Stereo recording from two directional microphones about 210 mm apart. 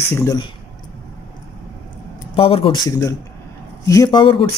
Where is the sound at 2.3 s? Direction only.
25° left (ahead or behind).